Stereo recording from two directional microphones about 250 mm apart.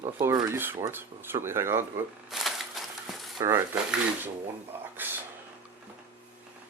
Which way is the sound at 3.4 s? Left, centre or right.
Centre.